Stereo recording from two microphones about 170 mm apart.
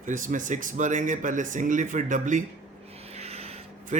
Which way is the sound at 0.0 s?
50° right (ahead or behind).